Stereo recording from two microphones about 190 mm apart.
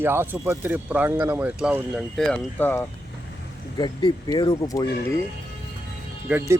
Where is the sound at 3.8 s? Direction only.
25° left (ahead or behind).